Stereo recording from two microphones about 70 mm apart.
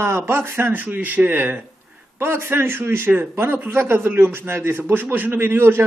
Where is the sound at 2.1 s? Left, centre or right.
Right.